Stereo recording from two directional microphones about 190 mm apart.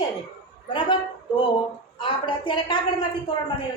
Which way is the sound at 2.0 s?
25° left (ahead or behind).